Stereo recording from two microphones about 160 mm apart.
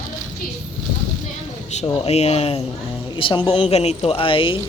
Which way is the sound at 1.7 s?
40° left (ahead or behind).